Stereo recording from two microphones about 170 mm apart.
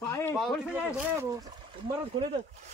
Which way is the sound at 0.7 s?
10° right (ahead or behind).